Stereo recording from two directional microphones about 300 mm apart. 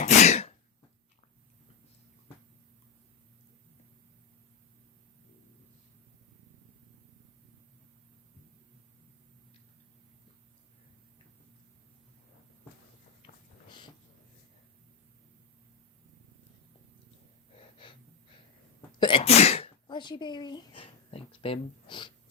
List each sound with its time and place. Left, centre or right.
0.0 s sneeze: left
13.2 s a sound: centre
17.8 s wheeze: centre
18.9 s sneeze: centre